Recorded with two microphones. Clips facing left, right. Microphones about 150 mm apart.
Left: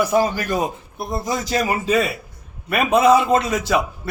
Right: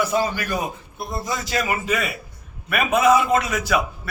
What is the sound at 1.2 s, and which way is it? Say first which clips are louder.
A man's voice: left 4 dB; 40° left (ahead or behind).